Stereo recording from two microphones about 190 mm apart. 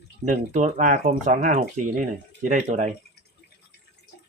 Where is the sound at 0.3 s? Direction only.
40° right (ahead or behind).